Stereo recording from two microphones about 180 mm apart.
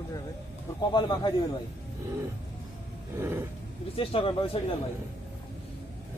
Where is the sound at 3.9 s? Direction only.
30° left (ahead or behind).